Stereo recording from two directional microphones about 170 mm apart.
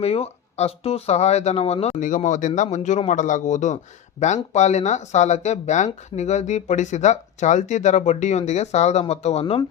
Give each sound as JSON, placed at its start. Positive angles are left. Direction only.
{"t": 0.0, "sound": "speech", "side_deg": 35}